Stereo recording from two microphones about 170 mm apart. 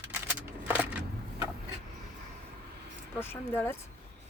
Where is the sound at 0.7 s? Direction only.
10° right (ahead or behind).